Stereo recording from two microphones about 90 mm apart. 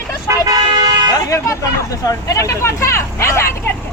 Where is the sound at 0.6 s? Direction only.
50° right (ahead or behind).